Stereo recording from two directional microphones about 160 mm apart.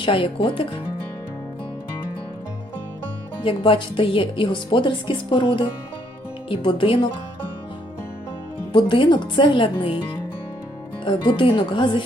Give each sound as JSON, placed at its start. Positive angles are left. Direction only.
{"t": 0.0, "sound": "speech", "side_deg": 35}
{"t": 3.4, "sound": "speech", "side_deg": 30}
{"t": 8.7, "sound": "speech", "side_deg": 30}
{"t": 11.0, "sound": "speech", "side_deg": 30}